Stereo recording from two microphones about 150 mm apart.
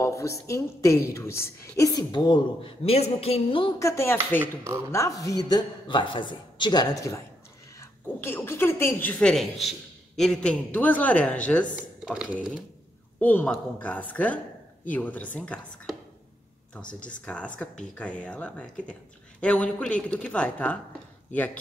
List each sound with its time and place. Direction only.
0.0 s a woman's voice: 20° left (ahead or behind); by 3.7 s 35° left (ahead or behind)
3.8 s a woman's voice: 15° left (ahead or behind)
11.7 s speech: 5° right (ahead or behind)
13.2 s a woman's voice: 10° left (ahead or behind)
17.0 s a woman's voice: 10° left (ahead or behind)